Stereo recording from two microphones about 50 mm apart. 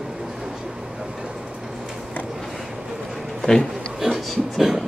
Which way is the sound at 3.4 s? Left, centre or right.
Centre.